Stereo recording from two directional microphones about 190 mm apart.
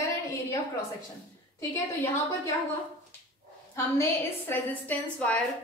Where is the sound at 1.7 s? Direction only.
15° left (ahead or behind).